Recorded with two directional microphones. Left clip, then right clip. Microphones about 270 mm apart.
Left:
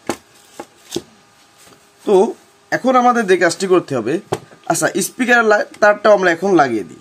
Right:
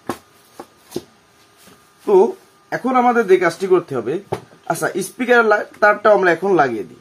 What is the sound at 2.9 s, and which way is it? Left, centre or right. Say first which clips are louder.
Speech: left 1 dB; left.